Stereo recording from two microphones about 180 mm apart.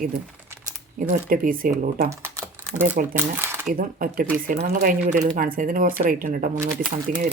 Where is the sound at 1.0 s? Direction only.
50° right (ahead or behind).